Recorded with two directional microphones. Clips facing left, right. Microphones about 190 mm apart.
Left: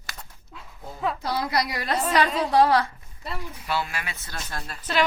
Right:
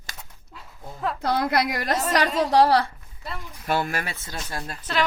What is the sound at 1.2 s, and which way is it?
A woman's voice, 55° right (ahead or behind).